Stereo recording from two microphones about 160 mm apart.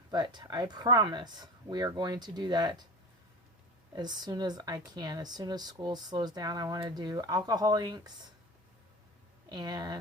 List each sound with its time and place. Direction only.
0.1 s speech: 25° right (ahead or behind)
3.9 s speech: 25° right (ahead or behind)
9.5 s speech: 25° right (ahead or behind)